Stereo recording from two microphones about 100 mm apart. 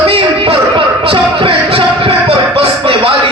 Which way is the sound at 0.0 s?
65° right (ahead or behind).